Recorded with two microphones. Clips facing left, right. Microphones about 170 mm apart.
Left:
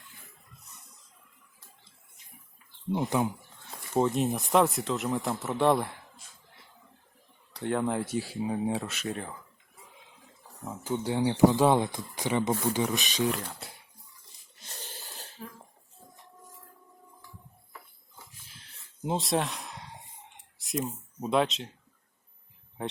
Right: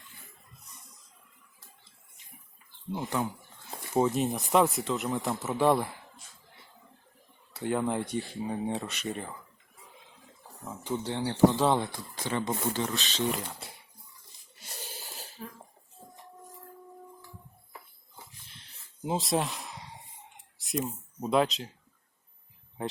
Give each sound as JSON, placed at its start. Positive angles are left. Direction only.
{"t": 2.9, "sound": "speech", "side_deg": 20}
{"t": 3.9, "sound": "speech", "side_deg": 0}
{"t": 7.5, "sound": "speech", "side_deg": 0}
{"t": 10.8, "sound": "speech", "side_deg": 5}
{"t": 13.2, "sound": "speech", "side_deg": 0}
{"t": 14.7, "sound": "a sound", "side_deg": -10}
{"t": 18.4, "sound": "a sound", "side_deg": 0}
{"t": 20.6, "sound": "speech", "side_deg": 0}
{"t": 22.8, "sound": "speech", "side_deg": 0}